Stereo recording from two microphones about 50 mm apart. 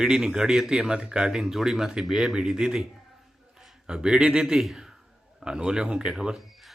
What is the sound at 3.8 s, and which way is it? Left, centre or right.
A man's voice, centre.